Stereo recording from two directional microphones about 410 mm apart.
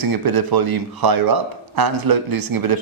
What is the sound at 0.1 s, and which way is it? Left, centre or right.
Speech, right.